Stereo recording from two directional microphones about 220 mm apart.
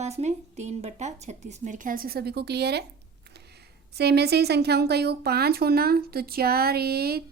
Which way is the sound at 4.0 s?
50° right (ahead or behind).